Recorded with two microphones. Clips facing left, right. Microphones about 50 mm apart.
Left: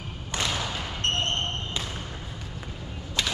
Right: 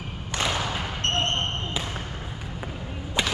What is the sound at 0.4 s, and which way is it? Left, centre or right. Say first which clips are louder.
Basketball bounce: right 3 dB; centre.